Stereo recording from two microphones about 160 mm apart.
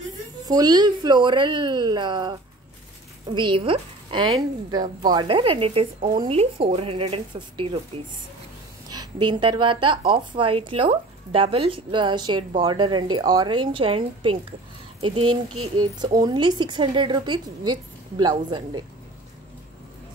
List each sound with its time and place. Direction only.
0.5 s speech: 25° right (ahead or behind)
3.3 s a woman's voice: 30° right (ahead or behind)